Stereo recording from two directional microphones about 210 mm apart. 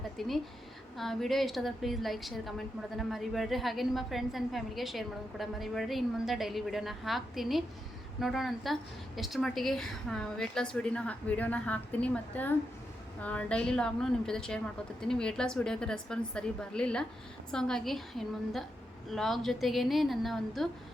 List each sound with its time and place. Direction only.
0.2 s a woman's voice: centre (ahead or behind)